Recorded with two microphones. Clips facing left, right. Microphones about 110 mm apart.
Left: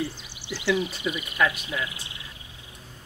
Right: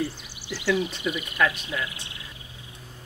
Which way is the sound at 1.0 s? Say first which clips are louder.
Even; 20° left (ahead or behind).